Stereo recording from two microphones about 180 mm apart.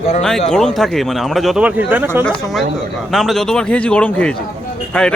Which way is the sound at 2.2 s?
5° left (ahead or behind).